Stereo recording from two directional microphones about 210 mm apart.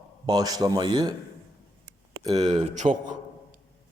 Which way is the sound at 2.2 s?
20° right (ahead or behind).